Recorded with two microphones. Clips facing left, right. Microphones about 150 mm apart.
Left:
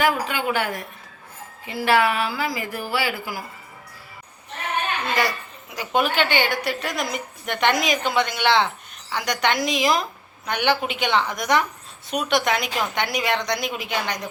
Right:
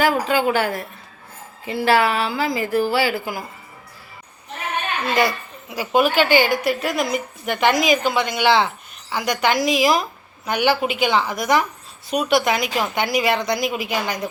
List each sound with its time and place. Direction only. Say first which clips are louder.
0.0 s a woman's voice: right 4 dB; 35° right (ahead or behind)
5.7 s a woman's voice: right 4 dB; 10° right (ahead or behind)